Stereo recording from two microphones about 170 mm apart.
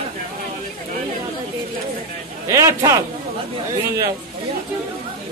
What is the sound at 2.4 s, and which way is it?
Speech, 15° right (ahead or behind).